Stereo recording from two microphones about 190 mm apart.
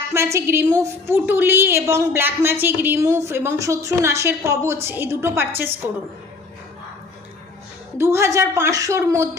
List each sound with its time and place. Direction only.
0.1 s a woman's voice: 15° right (ahead or behind)
7.9 s a woman's voice: 15° right (ahead or behind)